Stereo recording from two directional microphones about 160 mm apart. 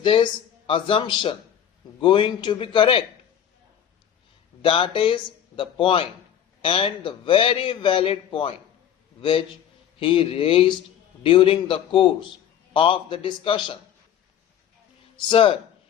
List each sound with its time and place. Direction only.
0.0 s a man's voice: 30° left (ahead or behind)
4.6 s a man's voice: 35° left (ahead or behind)
10.0 s a man's voice: 35° left (ahead or behind)
15.3 s a man's voice: 35° left (ahead or behind)